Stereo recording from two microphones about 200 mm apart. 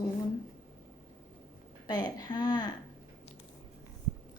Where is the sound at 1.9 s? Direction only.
20° left (ahead or behind).